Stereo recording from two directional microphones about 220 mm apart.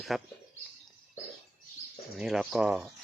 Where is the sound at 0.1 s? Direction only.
Centre (ahead or behind).